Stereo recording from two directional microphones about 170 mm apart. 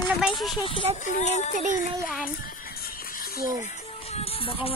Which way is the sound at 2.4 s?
60° left (ahead or behind).